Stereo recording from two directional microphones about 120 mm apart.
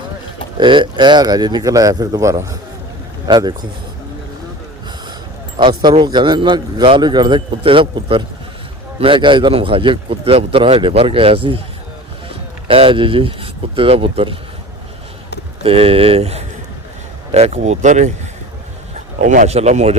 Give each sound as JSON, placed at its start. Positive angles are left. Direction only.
{"t": 0.5, "sound": "speech", "side_deg": -40}
{"t": 3.2, "sound": "speech", "side_deg": -35}
{"t": 5.5, "sound": "a man's voice", "side_deg": -40}
{"t": 15.6, "sound": "a man's voice", "side_deg": -50}